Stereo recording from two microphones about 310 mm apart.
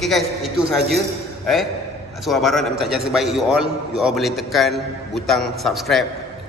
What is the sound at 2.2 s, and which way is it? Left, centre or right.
A man's voice, centre.